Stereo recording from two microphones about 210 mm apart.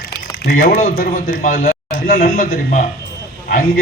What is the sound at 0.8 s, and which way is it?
A man's voice, 45° left (ahead or behind).